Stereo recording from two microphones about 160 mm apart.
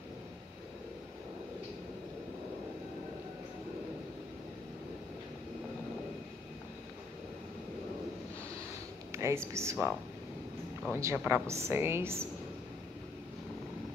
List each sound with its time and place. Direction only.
9.1 s a woman's voice: 15° right (ahead or behind)